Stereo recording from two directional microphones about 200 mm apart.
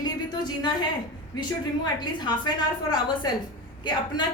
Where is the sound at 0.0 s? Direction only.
20° left (ahead or behind).